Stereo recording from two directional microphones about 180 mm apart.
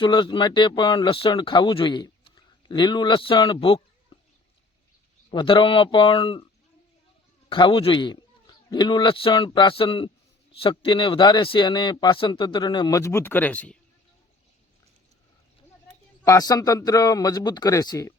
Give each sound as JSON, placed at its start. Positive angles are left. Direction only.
{"t": 0.0, "sound": "speech", "side_deg": 25}
{"t": 4.1, "sound": "a sound", "side_deg": 30}
{"t": 5.3, "sound": "speech", "side_deg": 25}
{"t": 7.5, "sound": "speech", "side_deg": 30}
{"t": 16.2, "sound": "speech", "side_deg": 20}